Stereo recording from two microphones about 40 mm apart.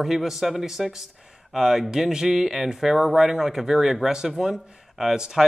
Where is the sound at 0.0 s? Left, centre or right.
Centre.